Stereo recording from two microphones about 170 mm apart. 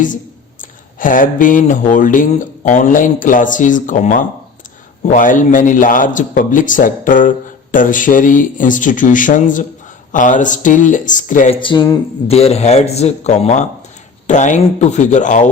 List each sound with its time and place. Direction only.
0.9 s a man's voice: 50° left (ahead or behind)
11.5 s a man's voice: 30° left (ahead or behind); by 15.4 s 45° left (ahead or behind)